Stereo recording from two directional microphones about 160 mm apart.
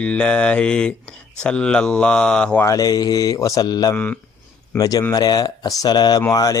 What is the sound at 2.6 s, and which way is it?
Speech, 25° left (ahead or behind).